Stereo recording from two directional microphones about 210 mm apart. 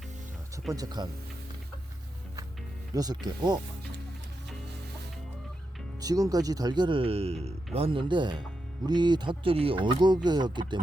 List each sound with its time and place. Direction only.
0.7 s speech: 20° right (ahead or behind)
2.9 s speech: 15° right (ahead or behind)
6.0 s speech: 15° right (ahead or behind)